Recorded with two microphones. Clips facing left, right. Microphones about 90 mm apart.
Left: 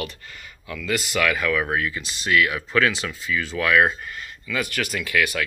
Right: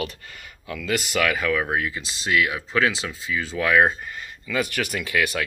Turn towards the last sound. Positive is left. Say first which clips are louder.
# left 1 dB
turn(degrees=-30)  # may be behind; listen again after turning